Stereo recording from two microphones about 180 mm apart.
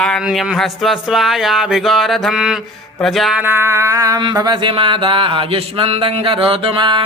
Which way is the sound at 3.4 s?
10° right (ahead or behind).